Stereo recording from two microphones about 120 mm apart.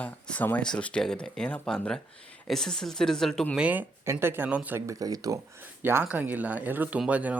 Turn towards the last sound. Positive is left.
turn(degrees=-10)  # may be behind; listen again after turning